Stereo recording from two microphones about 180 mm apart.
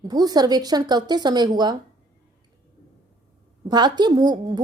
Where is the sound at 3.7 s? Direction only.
25° right (ahead or behind).